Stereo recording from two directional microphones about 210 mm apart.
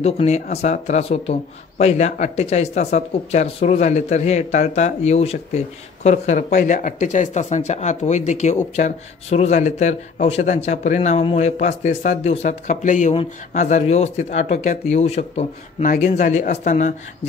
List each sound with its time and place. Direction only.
0.0 s speech: 30° left (ahead or behind)